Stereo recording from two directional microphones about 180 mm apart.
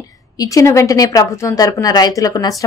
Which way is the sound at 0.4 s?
20° left (ahead or behind).